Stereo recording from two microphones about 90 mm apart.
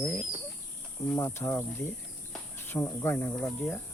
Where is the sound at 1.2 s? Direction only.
30° left (ahead or behind).